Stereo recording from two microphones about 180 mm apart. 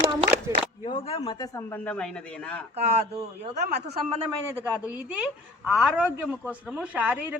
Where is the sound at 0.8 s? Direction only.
30° left (ahead or behind).